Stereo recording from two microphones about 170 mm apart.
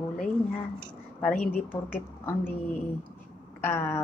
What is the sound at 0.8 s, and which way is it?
A woman's voice, 5° left (ahead or behind).